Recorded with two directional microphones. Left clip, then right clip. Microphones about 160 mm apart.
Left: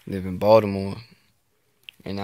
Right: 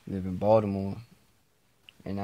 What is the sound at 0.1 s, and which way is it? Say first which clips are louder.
Speech: left 7 dB; 25° left (ahead or behind).